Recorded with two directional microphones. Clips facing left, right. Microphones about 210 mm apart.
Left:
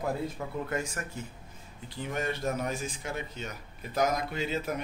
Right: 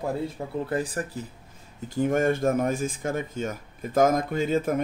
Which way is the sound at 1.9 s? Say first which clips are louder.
Right 11 dB; 50° right (ahead or behind).